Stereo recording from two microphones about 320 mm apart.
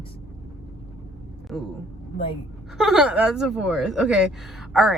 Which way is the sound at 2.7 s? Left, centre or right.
Centre.